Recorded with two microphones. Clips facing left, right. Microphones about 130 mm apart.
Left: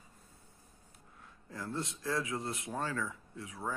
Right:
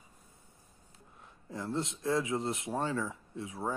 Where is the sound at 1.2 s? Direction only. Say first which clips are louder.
Right 4 dB; 20° right (ahead or behind).